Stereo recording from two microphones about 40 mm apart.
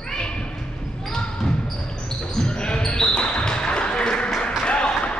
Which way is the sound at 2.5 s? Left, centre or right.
Left.